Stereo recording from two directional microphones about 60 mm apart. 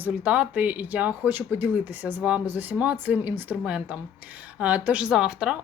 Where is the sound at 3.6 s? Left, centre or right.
Centre.